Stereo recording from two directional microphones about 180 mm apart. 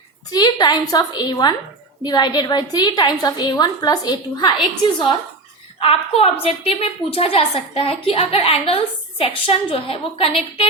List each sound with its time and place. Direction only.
0.3 s a woman's voice: 25° left (ahead or behind)
5.8 s a woman's voice: 35° left (ahead or behind)